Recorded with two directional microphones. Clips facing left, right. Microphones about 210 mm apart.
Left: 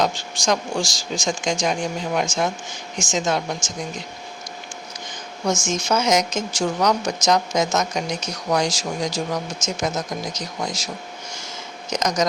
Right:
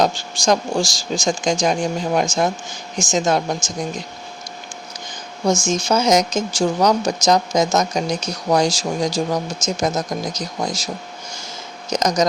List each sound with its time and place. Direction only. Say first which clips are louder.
0.0 s speech: right 4 dB; 35° right (ahead or behind)
5.6 s speech: right 2 dB; 35° right (ahead or behind)
11.9 s speech: right 4 dB; 35° right (ahead or behind)